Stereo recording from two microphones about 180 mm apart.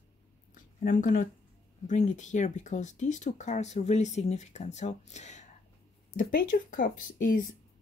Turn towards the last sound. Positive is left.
turn(degrees=50)  # may be behind; listen again after turning